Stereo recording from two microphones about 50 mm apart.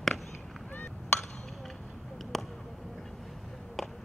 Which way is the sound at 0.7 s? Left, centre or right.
Left.